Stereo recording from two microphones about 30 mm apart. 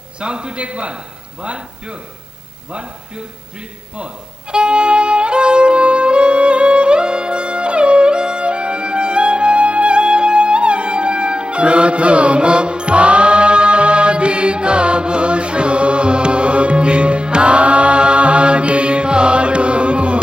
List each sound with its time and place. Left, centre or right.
0.2 s a man's voice: right
3.9 s violin: right